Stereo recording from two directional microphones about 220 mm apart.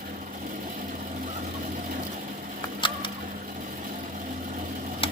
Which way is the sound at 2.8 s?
20° left (ahead or behind).